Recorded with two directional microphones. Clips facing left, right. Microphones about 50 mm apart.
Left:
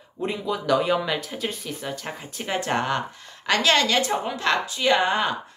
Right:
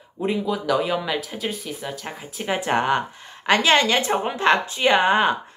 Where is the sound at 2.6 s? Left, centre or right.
Centre.